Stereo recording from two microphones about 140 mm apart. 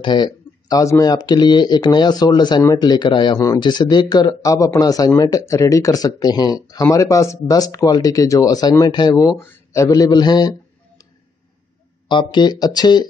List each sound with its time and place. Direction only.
0.0 s speech: 30° left (ahead or behind)
12.1 s speech: 35° left (ahead or behind)